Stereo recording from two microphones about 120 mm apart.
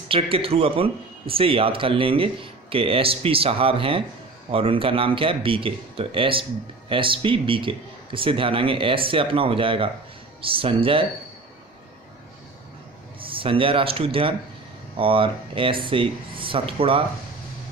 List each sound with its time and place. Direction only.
0.1 s a man's voice: 50° right (ahead or behind)
13.4 s a man's voice: 50° right (ahead or behind)